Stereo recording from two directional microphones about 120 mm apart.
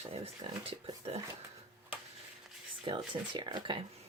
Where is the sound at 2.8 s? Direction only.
45° right (ahead or behind).